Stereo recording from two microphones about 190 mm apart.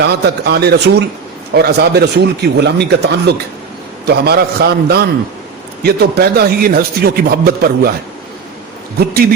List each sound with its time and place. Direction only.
0.0 s a man's voice: 60° right (ahead or behind)